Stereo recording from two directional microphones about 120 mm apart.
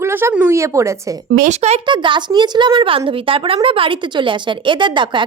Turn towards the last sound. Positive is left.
turn(degrees=-40)  # may be behind; listen again after turning